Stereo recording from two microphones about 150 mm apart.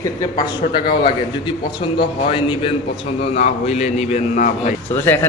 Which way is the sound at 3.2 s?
45° left (ahead or behind).